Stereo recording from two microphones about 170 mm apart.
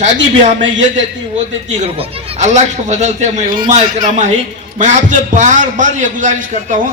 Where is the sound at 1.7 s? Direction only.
40° right (ahead or behind).